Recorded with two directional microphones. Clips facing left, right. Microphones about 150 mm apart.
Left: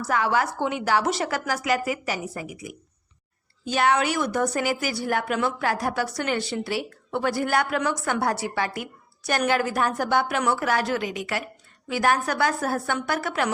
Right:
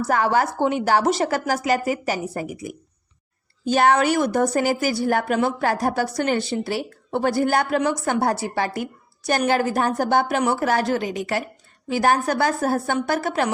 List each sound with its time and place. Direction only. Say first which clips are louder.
0.0 s a woman's voice: right 4 dB; 40° right (ahead or behind)